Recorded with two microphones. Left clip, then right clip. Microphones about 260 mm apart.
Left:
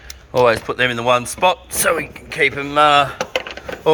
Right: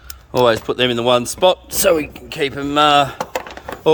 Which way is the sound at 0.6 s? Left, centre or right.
Right.